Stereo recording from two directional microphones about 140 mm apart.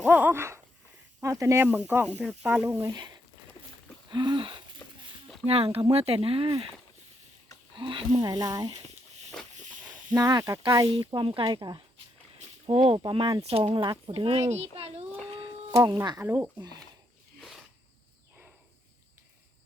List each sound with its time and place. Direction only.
0.1 s a sound: 15° right (ahead or behind)
1.2 s speech: 20° right (ahead or behind)
4.1 s wheeze: 35° right (ahead or behind)
4.8 s a sound: 15° left (ahead or behind)
5.5 s speech: 45° right (ahead or behind)
7.8 s speech: 35° right (ahead or behind)
8.2 s speech: 25° right (ahead or behind)
9.3 s a sound: 5° left (ahead or behind)
10.2 s speech: 25° right (ahead or behind)
12.4 s speech: 45° right (ahead or behind)
15.4 s speech: 25° right (ahead or behind)
17.4 s cricket: centre (ahead or behind)